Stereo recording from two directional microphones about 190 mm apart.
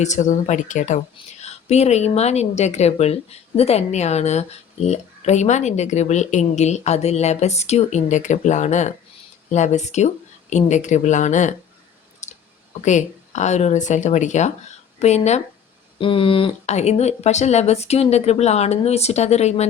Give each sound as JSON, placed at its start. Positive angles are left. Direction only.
{"t": 0.0, "sound": "a woman's voice", "side_deg": 40}
{"t": 12.2, "sound": "clicking", "side_deg": 40}
{"t": 12.8, "sound": "a woman's voice", "side_deg": 40}